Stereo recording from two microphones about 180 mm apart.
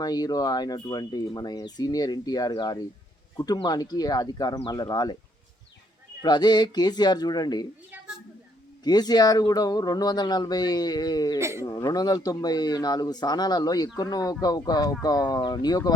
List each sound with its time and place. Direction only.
0.0 s speech: 20° left (ahead or behind)
6.2 s speech: 25° left (ahead or behind)
8.8 s speech: 20° left (ahead or behind)
11.3 s speech: 15° right (ahead or behind)
11.6 s speech: 20° left (ahead or behind)